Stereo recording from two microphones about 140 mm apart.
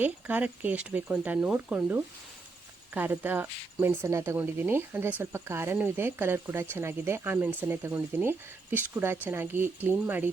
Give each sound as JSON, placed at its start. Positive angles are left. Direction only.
{"t": 0.0, "sound": "speech", "side_deg": -10}